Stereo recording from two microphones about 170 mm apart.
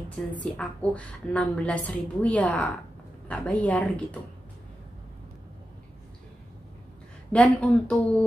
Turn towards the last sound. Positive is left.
turn(degrees=5)  # may be behind; listen again after turning